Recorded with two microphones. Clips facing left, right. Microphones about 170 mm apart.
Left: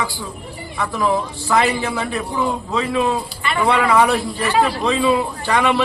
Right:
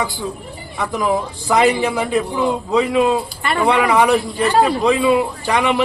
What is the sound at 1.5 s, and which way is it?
A man's voice, 15° right (ahead or behind).